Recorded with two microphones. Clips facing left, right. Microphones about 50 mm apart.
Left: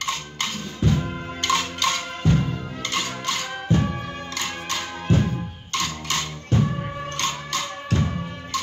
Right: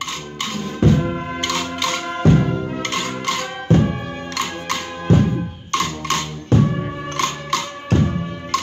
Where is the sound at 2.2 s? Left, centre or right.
Right.